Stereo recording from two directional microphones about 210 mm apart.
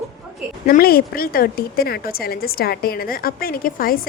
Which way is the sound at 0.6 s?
45° left (ahead or behind).